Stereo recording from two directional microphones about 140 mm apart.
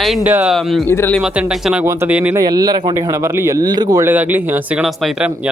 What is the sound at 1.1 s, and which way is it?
Speech, 5° right (ahead or behind).